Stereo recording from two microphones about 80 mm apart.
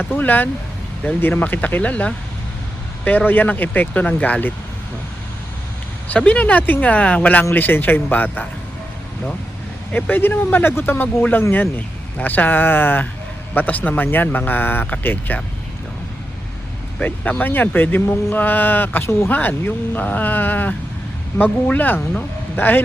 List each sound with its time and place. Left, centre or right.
0.0 s speech: left
6.1 s speech: centre
9.9 s speech: left
17.0 s speech: centre